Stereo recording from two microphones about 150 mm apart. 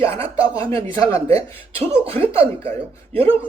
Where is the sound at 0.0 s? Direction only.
40° right (ahead or behind).